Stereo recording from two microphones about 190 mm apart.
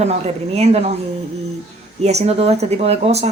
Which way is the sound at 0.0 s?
35° right (ahead or behind).